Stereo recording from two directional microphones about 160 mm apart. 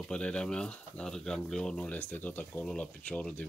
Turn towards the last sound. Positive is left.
turn(degrees=10)  # may be behind; listen again after turning